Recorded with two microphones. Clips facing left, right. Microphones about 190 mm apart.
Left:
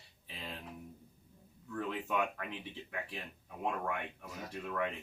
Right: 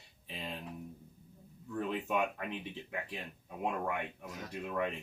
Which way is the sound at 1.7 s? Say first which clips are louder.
Right 2 dB; 15° right (ahead or behind).